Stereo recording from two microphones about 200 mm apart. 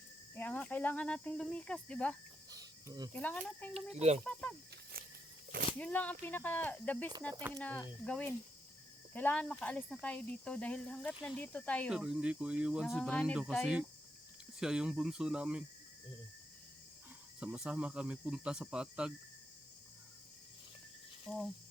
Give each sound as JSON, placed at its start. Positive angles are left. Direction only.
{"t": 0.3, "sound": "speech", "side_deg": 10}
{"t": 2.5, "sound": "cricket", "side_deg": -20}
{"t": 3.1, "sound": "speech", "side_deg": 10}
{"t": 3.9, "sound": "speech", "side_deg": -35}
{"t": 4.2, "sound": "speech", "side_deg": 5}
{"t": 4.7, "sound": "snake", "side_deg": -50}
{"t": 5.8, "sound": "speech", "side_deg": 5}
{"t": 17.4, "sound": "speech", "side_deg": -5}
{"t": 21.2, "sound": "cricket", "side_deg": 0}